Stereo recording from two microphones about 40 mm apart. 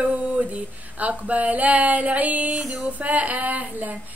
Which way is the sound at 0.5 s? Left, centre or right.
Right.